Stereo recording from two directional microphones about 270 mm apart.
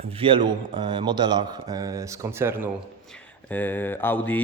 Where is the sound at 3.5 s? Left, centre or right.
Centre.